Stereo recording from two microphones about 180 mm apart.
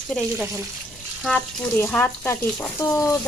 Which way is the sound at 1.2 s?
10° left (ahead or behind).